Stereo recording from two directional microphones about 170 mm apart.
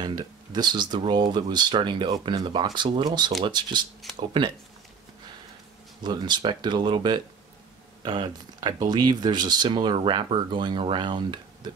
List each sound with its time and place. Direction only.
0.0 s speech: 25° right (ahead or behind)
4.0 s a sound: centre (ahead or behind)
6.0 s speech: 25° right (ahead or behind)